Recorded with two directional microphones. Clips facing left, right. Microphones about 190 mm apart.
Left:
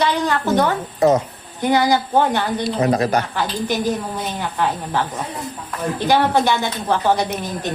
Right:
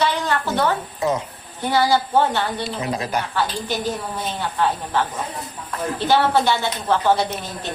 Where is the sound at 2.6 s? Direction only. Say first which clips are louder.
Left 7 dB; 40° left (ahead or behind).